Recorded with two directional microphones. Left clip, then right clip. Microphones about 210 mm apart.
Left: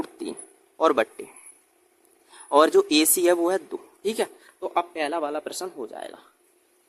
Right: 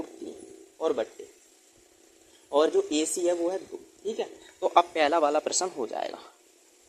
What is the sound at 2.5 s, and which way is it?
Speech, 40° left (ahead or behind).